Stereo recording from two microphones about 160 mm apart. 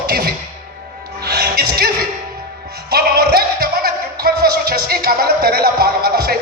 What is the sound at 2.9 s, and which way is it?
Music, 80° right.